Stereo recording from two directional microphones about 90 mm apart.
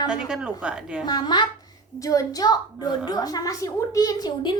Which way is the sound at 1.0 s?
50° left (ahead or behind).